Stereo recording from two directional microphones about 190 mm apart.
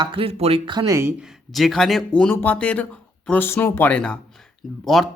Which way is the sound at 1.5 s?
Centre (ahead or behind).